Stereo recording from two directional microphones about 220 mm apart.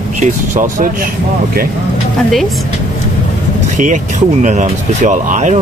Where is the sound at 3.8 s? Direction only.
35° right (ahead or behind).